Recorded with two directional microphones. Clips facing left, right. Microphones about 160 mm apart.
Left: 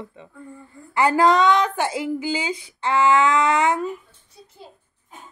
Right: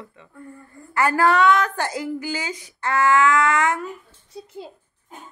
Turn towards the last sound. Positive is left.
turn(degrees=-90)